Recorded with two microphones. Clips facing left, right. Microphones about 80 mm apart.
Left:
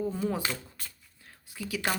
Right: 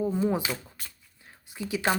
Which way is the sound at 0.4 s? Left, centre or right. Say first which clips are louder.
Right 1 dB; centre.